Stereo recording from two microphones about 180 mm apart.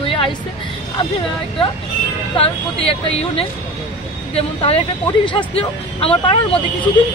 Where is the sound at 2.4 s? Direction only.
30° left (ahead or behind).